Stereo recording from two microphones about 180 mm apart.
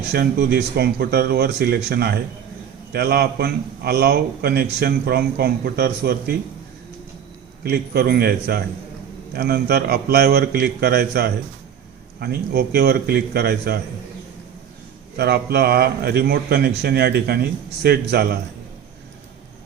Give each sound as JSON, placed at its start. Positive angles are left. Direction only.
{"t": 0.1, "sound": "a man's voice", "side_deg": -60}
{"t": 7.6, "sound": "a man's voice", "side_deg": -60}
{"t": 15.1, "sound": "a man's voice", "side_deg": -65}